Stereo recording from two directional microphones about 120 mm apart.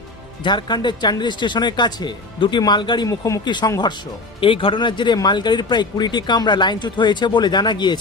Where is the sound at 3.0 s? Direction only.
25° left (ahead or behind).